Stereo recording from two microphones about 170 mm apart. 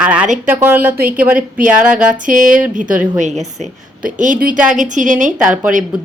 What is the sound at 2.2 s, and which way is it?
A woman's voice, 50° right (ahead or behind).